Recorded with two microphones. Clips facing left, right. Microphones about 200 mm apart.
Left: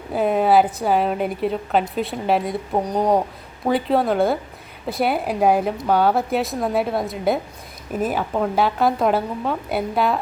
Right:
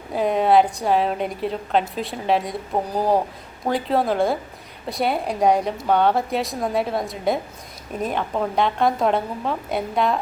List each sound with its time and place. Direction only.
0.1 s a woman's voice: centre (ahead or behind)